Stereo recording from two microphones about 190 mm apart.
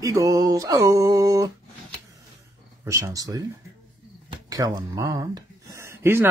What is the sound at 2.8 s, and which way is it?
Speech, 15° right (ahead or behind).